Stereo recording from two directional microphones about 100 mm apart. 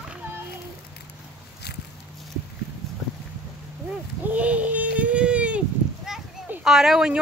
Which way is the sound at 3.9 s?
15° right (ahead or behind).